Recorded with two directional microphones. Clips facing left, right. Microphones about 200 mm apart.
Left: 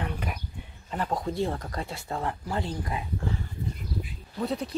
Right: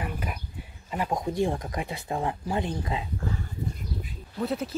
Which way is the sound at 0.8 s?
10° right (ahead or behind).